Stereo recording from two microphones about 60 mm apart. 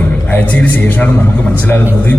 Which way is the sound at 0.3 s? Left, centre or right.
Left.